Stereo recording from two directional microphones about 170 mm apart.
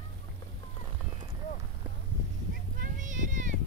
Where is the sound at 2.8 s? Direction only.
50° right (ahead or behind).